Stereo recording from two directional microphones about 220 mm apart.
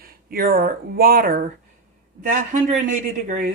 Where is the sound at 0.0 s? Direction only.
40° right (ahead or behind).